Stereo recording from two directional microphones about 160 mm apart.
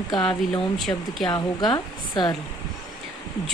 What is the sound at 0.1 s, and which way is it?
Speech, centre (ahead or behind).